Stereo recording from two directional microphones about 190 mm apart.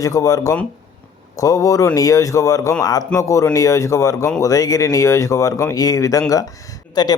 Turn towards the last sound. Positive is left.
turn(degrees=20)  # may be behind; listen again after turning